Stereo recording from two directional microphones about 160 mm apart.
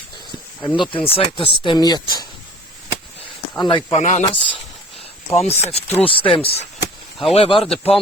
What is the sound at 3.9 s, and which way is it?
Speech, 45° left (ahead or behind).